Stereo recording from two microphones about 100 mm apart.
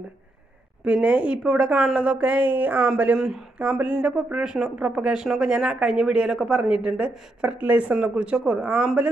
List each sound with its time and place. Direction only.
0.8 s speech: 10° right (ahead or behind)